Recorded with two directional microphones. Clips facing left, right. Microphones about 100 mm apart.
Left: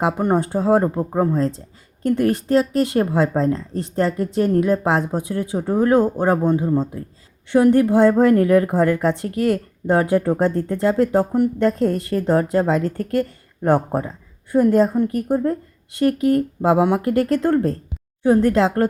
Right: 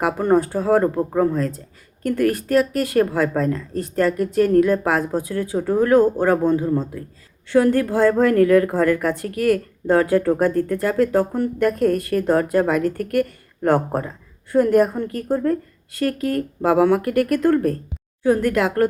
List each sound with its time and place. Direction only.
0.0 s a woman's voice: 20° left (ahead or behind)